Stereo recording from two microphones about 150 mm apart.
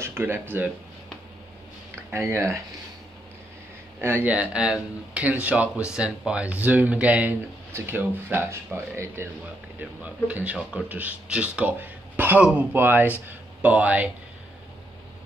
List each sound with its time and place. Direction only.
0.0 s speech: 15° right (ahead or behind)
2.1 s speech: 20° right (ahead or behind)
4.0 s speech: 15° right (ahead or behind)